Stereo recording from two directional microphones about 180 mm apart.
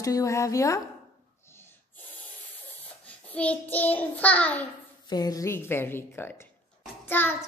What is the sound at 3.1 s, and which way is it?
Child singing, 10° left (ahead or behind).